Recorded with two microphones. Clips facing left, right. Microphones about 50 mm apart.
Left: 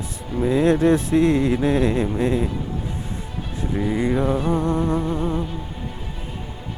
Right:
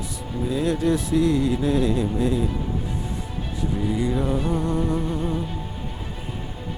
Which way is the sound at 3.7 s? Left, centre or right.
Left.